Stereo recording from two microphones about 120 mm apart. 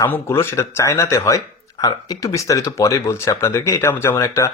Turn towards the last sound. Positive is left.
turn(degrees=25)  # may be behind; listen again after turning